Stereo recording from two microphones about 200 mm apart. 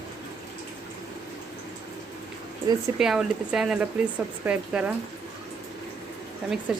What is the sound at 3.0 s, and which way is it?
Speech, 5° right (ahead or behind).